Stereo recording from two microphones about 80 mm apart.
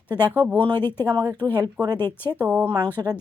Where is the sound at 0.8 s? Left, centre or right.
Left.